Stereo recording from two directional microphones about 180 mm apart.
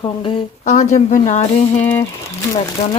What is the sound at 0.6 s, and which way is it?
Speech, 40° left (ahead or behind).